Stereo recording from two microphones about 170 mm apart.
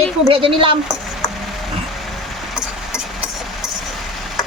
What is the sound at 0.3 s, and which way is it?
Speech, 30° right (ahead or behind).